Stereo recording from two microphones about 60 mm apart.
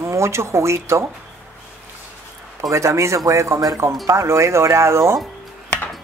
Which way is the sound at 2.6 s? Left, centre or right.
Right.